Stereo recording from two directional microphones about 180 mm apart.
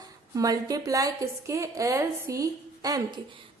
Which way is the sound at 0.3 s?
20° right (ahead or behind).